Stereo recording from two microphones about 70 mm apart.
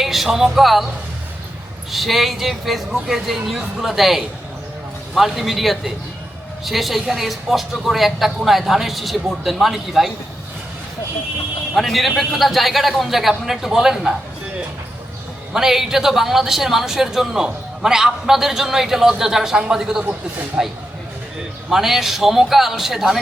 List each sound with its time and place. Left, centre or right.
0.0 s music: centre
1.9 s a man's voice: centre
11.7 s a man's voice: centre
15.5 s a man's voice: centre